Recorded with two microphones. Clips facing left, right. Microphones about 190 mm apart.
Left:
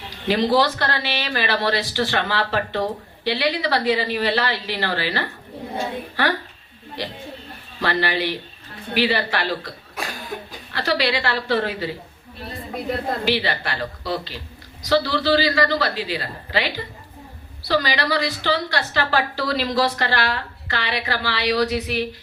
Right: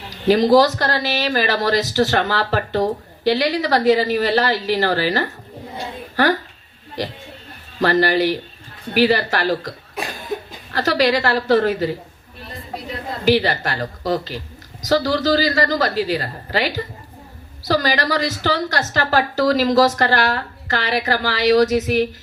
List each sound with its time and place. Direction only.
0.1 s speech: 40° right (ahead or behind)
7.0 s a woman's voice: 40° right (ahead or behind)
13.2 s a woman's voice: 45° right (ahead or behind)